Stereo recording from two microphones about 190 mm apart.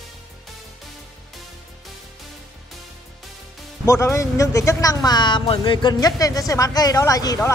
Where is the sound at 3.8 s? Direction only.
15° left (ahead or behind).